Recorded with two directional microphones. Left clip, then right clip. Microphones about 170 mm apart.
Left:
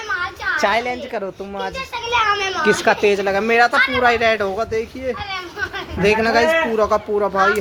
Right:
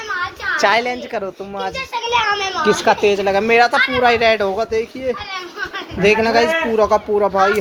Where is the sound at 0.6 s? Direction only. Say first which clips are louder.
Right 4 dB; 15° right (ahead or behind).